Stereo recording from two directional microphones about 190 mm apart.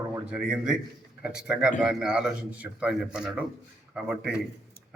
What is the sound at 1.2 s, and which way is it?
A man's voice, 5° right (ahead or behind).